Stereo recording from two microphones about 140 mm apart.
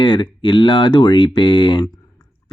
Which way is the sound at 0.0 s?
35° left (ahead or behind).